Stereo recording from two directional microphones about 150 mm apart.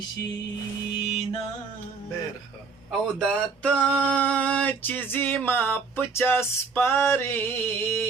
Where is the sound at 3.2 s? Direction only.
5° left (ahead or behind).